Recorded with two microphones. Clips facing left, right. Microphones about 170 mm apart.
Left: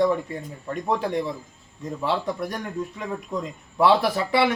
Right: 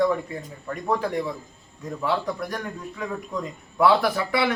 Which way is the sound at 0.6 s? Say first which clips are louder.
Even; 20° left (ahead or behind).